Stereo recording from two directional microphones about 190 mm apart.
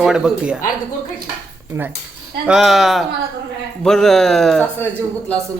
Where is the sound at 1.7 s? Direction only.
15° right (ahead or behind).